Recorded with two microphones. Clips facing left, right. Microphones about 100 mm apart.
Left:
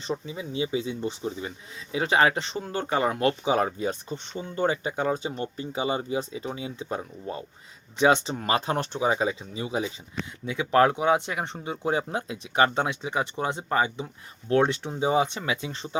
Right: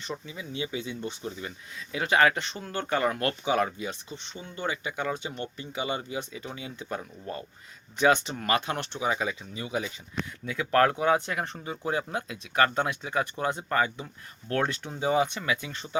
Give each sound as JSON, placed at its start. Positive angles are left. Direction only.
{"t": 0.0, "sound": "speech", "side_deg": 30}